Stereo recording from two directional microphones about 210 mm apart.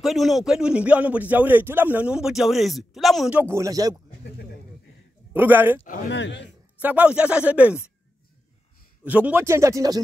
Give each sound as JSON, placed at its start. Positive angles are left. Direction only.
{"t": 0.0, "sound": "a man's voice", "side_deg": 0}
{"t": 5.3, "sound": "speech", "side_deg": -10}
{"t": 6.0, "sound": "speech", "side_deg": 55}
{"t": 6.8, "sound": "speech", "side_deg": -5}
{"t": 9.0, "sound": "speech", "side_deg": -5}